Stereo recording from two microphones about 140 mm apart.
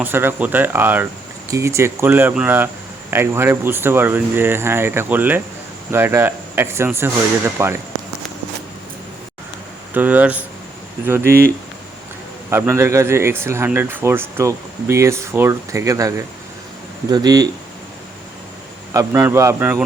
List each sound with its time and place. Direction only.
0.0 s speech: 15° right (ahead or behind)
9.9 s speech: 10° right (ahead or behind)
12.5 s speech: 20° right (ahead or behind)
18.9 s speech: 20° right (ahead or behind)